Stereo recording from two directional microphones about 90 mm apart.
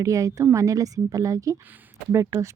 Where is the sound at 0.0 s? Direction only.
40° right (ahead or behind).